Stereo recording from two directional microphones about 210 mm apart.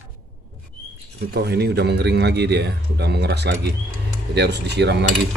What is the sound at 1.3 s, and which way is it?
A man's voice, 50° right (ahead or behind).